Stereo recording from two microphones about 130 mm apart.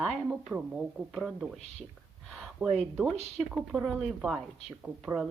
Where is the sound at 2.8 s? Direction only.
5° left (ahead or behind).